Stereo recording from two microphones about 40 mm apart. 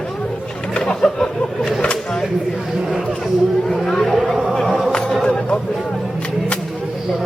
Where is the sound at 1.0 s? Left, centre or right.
Centre.